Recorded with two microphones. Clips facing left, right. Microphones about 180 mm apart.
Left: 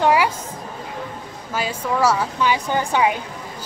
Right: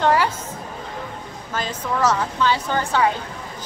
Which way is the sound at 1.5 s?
10° left (ahead or behind).